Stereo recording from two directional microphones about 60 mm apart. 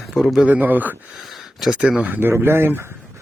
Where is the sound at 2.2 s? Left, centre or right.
Right.